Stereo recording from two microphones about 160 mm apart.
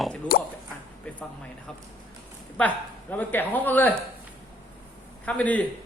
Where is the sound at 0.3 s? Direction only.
70° left (ahead or behind).